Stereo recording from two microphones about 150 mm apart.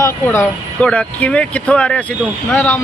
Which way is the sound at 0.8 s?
10° left (ahead or behind).